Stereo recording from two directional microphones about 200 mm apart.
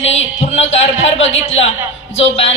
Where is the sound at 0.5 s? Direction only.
35° left (ahead or behind).